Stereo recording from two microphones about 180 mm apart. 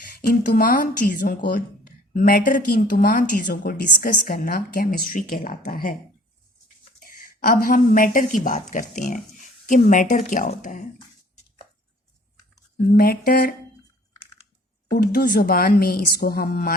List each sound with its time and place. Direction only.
0.2 s a woman's voice: 55° left (ahead or behind)
7.0 s a woman's voice: 50° left (ahead or behind)
13.0 s speech: 60° left (ahead or behind)
15.0 s speech: 60° left (ahead or behind)